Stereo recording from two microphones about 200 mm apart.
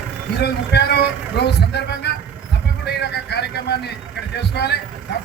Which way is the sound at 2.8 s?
55° left (ahead or behind).